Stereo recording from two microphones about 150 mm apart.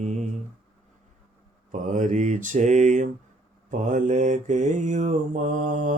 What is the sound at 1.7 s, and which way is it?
Mantra, 55° right (ahead or behind).